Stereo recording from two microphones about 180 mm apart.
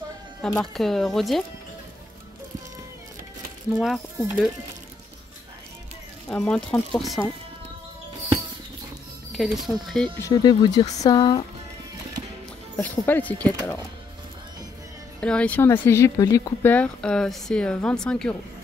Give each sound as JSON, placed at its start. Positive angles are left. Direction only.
{"t": 0.4, "sound": "speech", "side_deg": 0}
{"t": 3.8, "sound": "speech", "side_deg": 0}
{"t": 6.2, "sound": "speech", "side_deg": 5}
{"t": 9.3, "sound": "speech", "side_deg": 0}
{"t": 10.2, "sound": "speech", "side_deg": 25}
{"t": 12.7, "sound": "speech", "side_deg": 10}
{"t": 15.1, "sound": "speech", "side_deg": 5}